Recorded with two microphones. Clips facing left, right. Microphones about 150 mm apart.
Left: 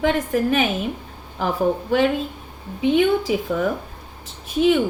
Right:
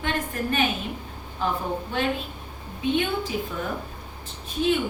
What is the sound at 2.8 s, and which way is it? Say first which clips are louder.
Speech: left 8 dB; 90° left.